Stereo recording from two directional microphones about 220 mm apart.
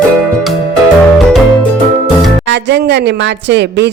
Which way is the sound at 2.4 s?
50° right (ahead or behind).